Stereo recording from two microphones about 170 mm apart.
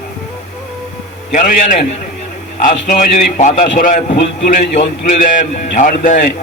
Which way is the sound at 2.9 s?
50° left (ahead or behind).